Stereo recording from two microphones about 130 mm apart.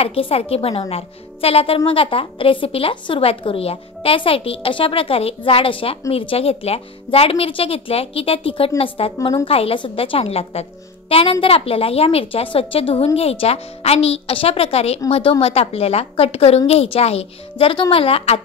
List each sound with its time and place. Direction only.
0.0 s a woman's voice: 50° left (ahead or behind)